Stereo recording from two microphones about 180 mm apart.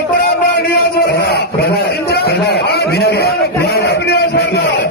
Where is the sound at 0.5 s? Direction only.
60° left (ahead or behind).